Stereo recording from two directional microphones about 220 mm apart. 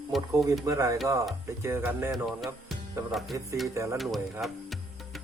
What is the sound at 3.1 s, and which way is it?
Music, centre (ahead or behind).